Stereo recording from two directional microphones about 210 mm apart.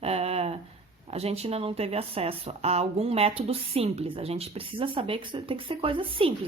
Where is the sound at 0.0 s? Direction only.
30° right (ahead or behind).